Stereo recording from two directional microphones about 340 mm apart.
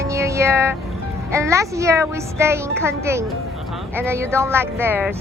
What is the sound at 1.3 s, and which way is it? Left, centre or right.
Speech, centre.